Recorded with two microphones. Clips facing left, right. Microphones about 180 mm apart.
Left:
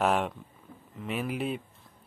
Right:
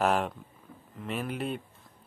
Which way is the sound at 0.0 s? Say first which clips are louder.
Even; centre (ahead or behind).